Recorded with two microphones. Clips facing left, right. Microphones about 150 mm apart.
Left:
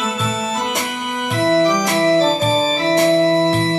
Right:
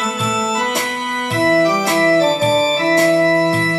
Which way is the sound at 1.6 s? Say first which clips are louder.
Even; 5° right (ahead or behind).